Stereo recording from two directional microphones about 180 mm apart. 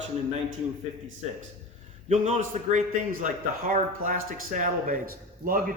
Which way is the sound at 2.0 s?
35° right (ahead or behind).